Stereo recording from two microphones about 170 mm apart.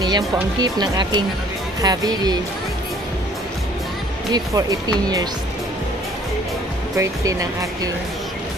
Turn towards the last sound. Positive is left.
turn(degrees=-20)  # may be behind; listen again after turning